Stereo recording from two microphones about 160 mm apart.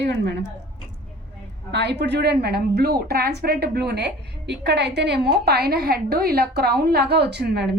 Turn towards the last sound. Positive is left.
turn(degrees=-90)